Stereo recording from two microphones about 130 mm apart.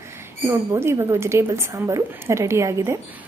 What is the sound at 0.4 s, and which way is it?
A woman's voice, 20° right (ahead or behind).